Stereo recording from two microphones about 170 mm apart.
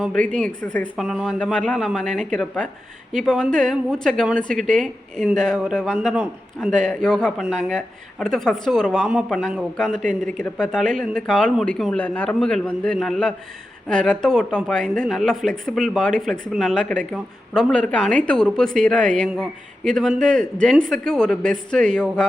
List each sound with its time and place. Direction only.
0.0 s a man's voice: 5° left (ahead or behind)